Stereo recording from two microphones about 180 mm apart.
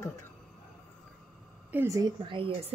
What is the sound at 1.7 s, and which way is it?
Speech, 15° right (ahead or behind).